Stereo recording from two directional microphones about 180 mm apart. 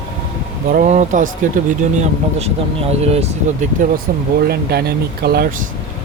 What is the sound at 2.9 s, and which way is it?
Speech, 35° right (ahead or behind).